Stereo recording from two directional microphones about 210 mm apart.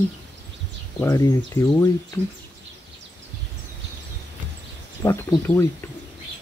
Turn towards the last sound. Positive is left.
turn(degrees=10)  # may be behind; listen again after turning